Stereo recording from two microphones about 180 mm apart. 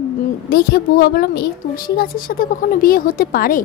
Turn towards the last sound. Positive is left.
turn(degrees=55)  # may be behind; listen again after turning